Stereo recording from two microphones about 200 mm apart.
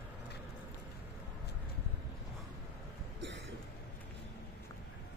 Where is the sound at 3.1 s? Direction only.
60° right (ahead or behind).